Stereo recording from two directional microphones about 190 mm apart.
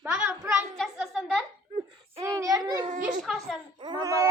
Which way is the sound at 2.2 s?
20° right (ahead or behind).